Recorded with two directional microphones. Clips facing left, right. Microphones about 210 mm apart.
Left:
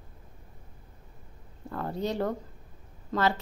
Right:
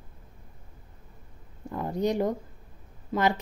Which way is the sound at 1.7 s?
15° right (ahead or behind).